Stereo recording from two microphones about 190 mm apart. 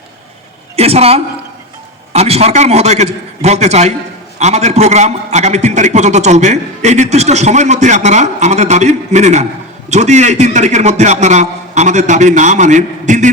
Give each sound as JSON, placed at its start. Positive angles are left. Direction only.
{"t": 0.8, "sound": "a woman's voice", "side_deg": -30}